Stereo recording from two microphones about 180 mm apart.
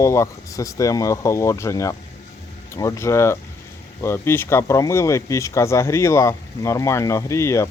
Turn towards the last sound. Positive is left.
turn(degrees=15)  # may be behind; listen again after turning